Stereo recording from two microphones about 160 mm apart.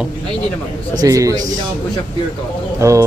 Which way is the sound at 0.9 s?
20° right (ahead or behind).